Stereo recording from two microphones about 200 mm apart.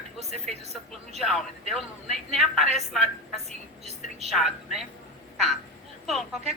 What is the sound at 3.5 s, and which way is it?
Speech, 30° right (ahead or behind).